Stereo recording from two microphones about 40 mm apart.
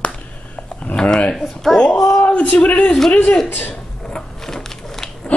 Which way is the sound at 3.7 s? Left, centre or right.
Centre.